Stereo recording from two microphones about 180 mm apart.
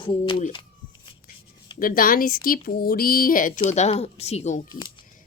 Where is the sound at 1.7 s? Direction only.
50° left (ahead or behind).